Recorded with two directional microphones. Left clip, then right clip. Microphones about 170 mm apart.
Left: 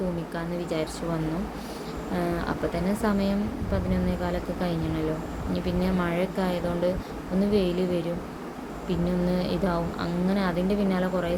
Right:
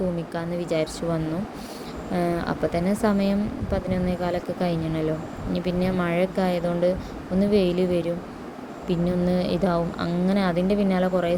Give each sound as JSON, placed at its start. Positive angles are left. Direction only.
{"t": 0.3, "sound": "speech", "side_deg": -30}
{"t": 2.1, "sound": "speech", "side_deg": -35}